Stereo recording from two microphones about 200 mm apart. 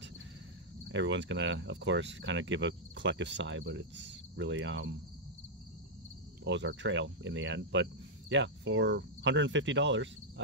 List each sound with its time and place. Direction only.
0.8 s speech: 65° right (ahead or behind)
6.4 s speech: 65° right (ahead or behind)